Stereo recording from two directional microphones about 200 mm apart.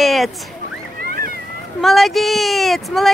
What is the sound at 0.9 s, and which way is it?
Boat, 50° right (ahead or behind).